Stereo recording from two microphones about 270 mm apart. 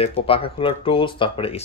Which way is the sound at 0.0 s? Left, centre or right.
Left.